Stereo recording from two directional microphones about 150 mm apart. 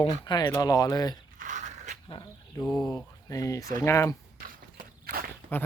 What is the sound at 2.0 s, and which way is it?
Insect, 30° left (ahead or behind).